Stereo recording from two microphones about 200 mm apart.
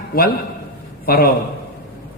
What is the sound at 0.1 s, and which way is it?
Speech, 45° left (ahead or behind).